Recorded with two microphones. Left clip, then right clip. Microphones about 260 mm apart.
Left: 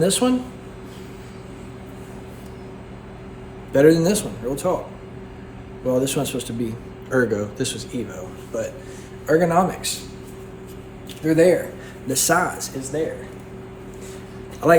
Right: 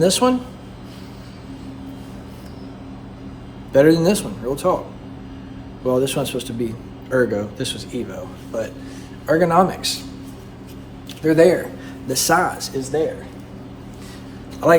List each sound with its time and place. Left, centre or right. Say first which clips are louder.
0.0 s a man's voice: right 3 dB; centre
3.7 s a man's voice: right 1 dB; centre
5.8 s a man's voice: right 2 dB; centre
11.2 s a man's voice: right 3 dB; centre
12.0 s a man's voice: right 2 dB; centre